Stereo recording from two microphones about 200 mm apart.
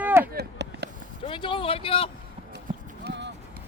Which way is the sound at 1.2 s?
25° left (ahead or behind).